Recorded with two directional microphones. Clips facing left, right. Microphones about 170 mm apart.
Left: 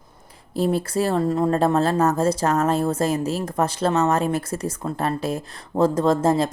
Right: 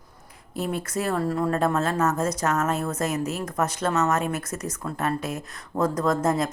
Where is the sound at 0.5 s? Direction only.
30° left (ahead or behind).